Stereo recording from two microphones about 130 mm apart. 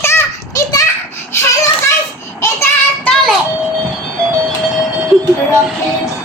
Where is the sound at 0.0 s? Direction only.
20° left (ahead or behind).